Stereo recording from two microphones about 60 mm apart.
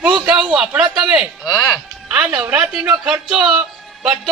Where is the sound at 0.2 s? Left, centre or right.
Centre.